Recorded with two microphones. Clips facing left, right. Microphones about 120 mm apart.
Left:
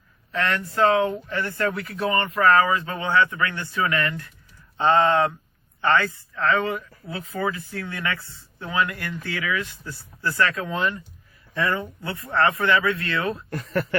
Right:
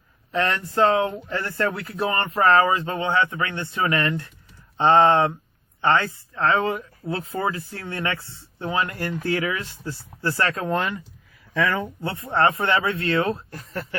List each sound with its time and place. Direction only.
0.3 s speech: 30° right (ahead or behind)
10.7 s speech: 65° right (ahead or behind)
11.6 s speech: 90° right
12.0 s speech: 25° right (ahead or behind)
13.5 s speech: 70° left (ahead or behind)